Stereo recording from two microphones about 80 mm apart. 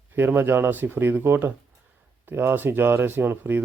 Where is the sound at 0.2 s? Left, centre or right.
Right.